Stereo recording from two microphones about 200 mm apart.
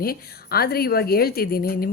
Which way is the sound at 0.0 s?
50° left (ahead or behind).